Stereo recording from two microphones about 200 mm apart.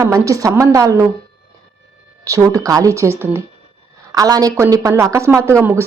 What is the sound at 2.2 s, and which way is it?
A woman's voice, 15° right (ahead or behind).